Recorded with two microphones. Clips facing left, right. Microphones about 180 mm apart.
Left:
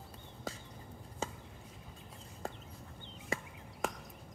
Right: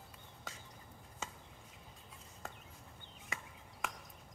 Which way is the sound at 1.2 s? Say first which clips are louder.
Left 7 dB; 30° left (ahead or behind).